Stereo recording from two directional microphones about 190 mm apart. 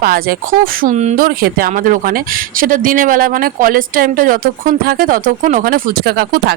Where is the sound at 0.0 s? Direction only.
50° right (ahead or behind).